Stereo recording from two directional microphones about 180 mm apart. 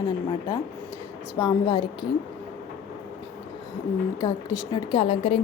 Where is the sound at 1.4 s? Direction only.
25° left (ahead or behind).